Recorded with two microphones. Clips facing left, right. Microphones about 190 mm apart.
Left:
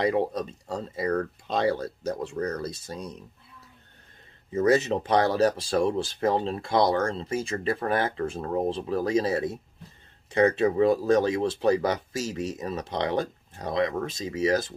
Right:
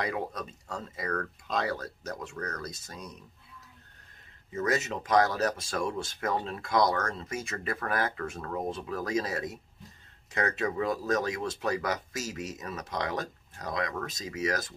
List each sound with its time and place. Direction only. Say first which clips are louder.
0.0 s speech: left 8 dB; 30° left (ahead or behind)
4.5 s speech: left 8 dB; 30° left (ahead or behind)